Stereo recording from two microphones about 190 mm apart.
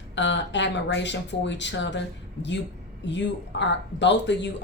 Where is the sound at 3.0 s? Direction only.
70° left (ahead or behind).